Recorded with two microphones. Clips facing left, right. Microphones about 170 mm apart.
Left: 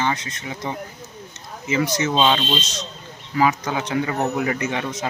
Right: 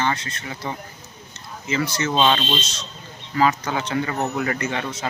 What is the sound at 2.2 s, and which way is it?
Speech, 5° left (ahead or behind).